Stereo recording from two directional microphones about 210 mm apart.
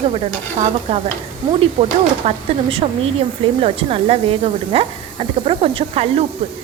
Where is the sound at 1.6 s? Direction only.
30° right (ahead or behind).